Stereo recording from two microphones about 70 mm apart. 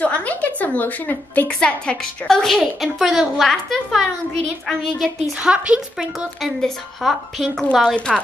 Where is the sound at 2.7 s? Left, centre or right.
Centre.